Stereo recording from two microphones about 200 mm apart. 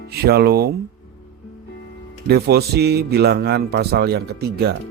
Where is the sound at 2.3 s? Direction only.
55° right (ahead or behind).